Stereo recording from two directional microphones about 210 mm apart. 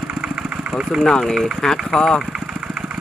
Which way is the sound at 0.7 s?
Centre (ahead or behind).